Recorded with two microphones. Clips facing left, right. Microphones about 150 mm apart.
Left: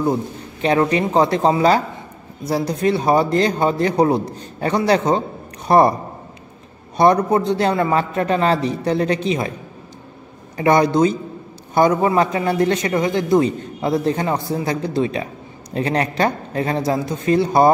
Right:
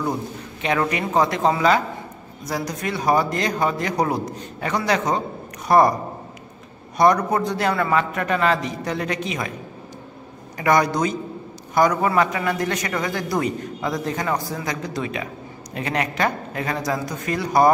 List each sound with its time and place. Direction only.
0.0 s a man's voice: 30° left (ahead or behind)
7.0 s a man's voice: 25° left (ahead or behind)
10.6 s a man's voice: 25° left (ahead or behind)